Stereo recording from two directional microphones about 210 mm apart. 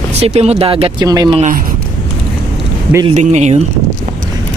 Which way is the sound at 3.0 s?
30° right (ahead or behind).